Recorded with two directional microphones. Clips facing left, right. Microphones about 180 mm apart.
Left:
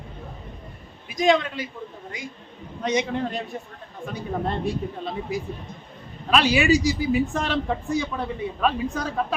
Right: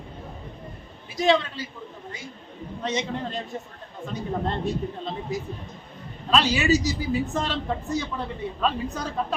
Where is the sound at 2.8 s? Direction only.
15° left (ahead or behind).